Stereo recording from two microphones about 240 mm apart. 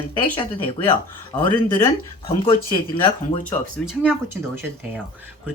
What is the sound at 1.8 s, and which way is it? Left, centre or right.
Speech, left.